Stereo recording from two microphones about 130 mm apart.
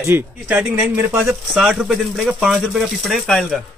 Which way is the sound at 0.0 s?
15° right (ahead or behind).